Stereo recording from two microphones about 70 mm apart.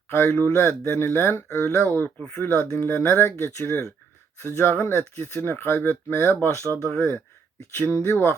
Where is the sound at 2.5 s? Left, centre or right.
Left.